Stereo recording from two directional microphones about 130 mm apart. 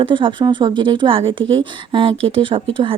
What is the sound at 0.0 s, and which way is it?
Speech, 40° right (ahead or behind).